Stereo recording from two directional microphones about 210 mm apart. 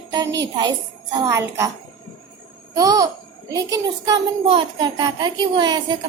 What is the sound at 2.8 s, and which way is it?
A woman's voice, 15° right (ahead or behind).